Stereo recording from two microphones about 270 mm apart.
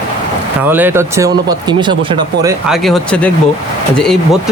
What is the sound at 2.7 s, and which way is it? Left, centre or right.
Speech, centre.